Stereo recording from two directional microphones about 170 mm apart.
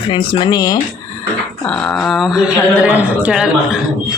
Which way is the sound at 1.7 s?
5° left (ahead or behind).